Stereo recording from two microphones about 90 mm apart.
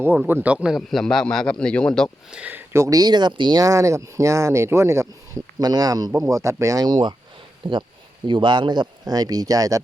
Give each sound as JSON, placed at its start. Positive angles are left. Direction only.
{"t": 0.3, "sound": "speech", "side_deg": -20}
{"t": 0.8, "sound": "a man's voice", "side_deg": 5}
{"t": 2.3, "sound": "speech", "side_deg": -15}
{"t": 2.7, "sound": "speech", "side_deg": -35}
{"t": 3.0, "sound": "speech", "side_deg": -55}
{"t": 3.6, "sound": "speech", "side_deg": -35}
{"t": 5.6, "sound": "speech", "side_deg": -45}
{"t": 6.3, "sound": "speech", "side_deg": -35}
{"t": 7.6, "sound": "speech", "side_deg": -70}